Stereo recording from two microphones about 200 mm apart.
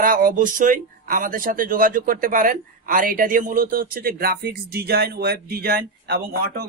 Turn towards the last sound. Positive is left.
turn(degrees=-50)  # may be behind; listen again after turning